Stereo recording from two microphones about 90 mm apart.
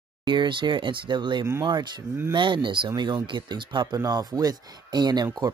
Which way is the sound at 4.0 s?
45° right (ahead or behind).